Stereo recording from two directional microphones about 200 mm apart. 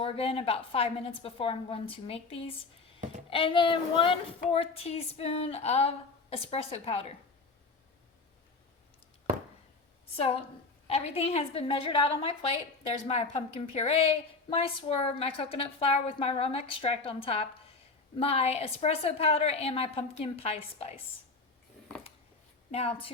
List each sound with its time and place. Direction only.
0.0 s a woman's voice: 30° left (ahead or behind)
10.8 s a woman's voice: 30° left (ahead or behind)
22.7 s a woman's voice: 30° left (ahead or behind)